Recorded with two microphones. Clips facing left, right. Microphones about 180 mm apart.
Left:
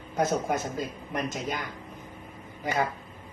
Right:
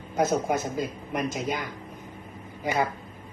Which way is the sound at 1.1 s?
5° right (ahead or behind).